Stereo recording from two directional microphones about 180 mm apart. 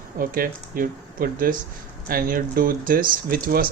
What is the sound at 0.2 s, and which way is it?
Speech, 50° right (ahead or behind).